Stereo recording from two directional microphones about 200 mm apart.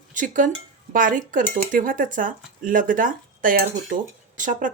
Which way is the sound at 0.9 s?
40° right (ahead or behind).